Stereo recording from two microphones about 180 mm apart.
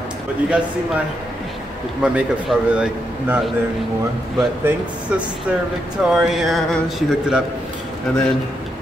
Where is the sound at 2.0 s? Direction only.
5° right (ahead or behind).